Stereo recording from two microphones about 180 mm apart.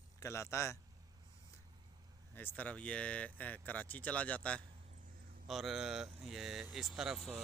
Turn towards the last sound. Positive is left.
turn(degrees=0)  # may be behind; listen again after turning